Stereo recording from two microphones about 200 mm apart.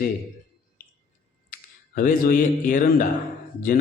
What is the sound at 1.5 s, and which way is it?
A man's voice, 40° left (ahead or behind).